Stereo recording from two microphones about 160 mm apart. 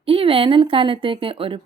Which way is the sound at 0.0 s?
35° right (ahead or behind).